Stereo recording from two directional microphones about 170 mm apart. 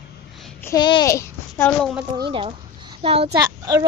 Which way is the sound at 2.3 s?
30° right (ahead or behind).